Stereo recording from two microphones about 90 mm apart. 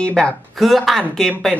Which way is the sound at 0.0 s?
10° left (ahead or behind).